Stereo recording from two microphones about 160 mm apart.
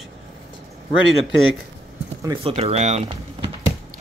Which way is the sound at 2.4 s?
40° right (ahead or behind).